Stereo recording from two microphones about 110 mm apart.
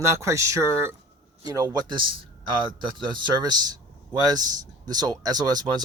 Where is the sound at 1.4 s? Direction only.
35° right (ahead or behind).